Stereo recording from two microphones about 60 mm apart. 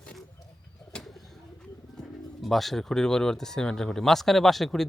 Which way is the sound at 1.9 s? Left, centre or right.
Centre.